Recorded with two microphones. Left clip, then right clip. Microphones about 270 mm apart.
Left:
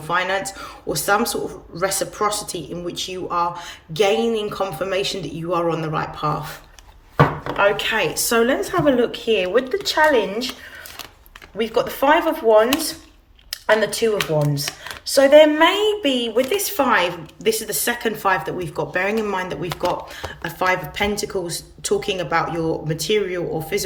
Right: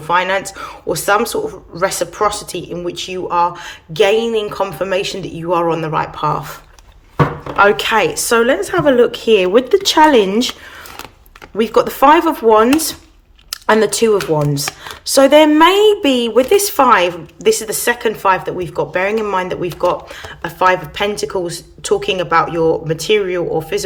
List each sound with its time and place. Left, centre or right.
0.1 s a woman's voice: centre
7.8 s a woman's voice: centre
11.5 s a woman's voice: right